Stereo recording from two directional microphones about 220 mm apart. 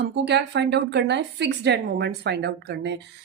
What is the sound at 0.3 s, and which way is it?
Speech, 50° right (ahead or behind).